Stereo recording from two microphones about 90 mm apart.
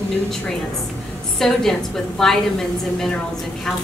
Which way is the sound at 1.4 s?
5° left (ahead or behind).